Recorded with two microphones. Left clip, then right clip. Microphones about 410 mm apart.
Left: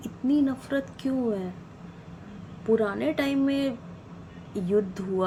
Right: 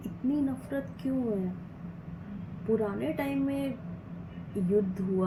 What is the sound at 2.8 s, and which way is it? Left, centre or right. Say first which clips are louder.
Speech: left 5 dB; left.